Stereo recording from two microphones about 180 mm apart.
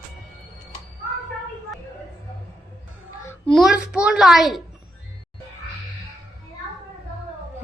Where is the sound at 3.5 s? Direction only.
5° right (ahead or behind).